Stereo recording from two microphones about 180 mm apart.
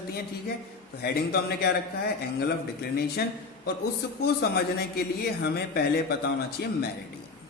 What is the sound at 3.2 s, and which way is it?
A man's voice, 60° left (ahead or behind).